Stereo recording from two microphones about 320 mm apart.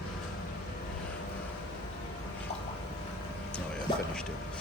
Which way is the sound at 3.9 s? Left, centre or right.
Centre.